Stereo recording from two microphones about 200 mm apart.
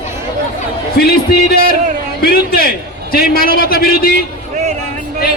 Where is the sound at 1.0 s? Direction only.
50° left (ahead or behind).